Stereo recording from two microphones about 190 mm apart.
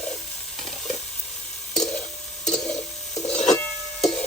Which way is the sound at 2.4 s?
5° left (ahead or behind).